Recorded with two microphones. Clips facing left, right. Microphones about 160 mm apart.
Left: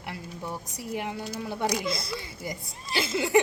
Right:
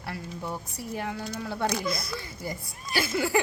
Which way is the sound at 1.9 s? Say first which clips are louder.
Even; 25° left (ahead or behind).